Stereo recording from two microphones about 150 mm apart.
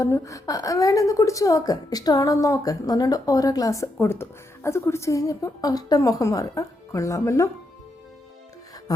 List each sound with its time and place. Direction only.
0.0 s a woman's voice: 20° left (ahead or behind)